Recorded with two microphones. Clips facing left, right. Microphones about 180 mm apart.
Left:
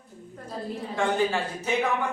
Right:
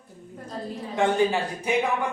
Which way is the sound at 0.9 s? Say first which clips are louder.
Right 3 dB; 15° right (ahead or behind).